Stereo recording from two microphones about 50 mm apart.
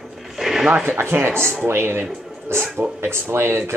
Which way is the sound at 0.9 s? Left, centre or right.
Right.